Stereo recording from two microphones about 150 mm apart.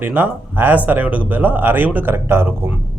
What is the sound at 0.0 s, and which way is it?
Speech, 10° right (ahead or behind).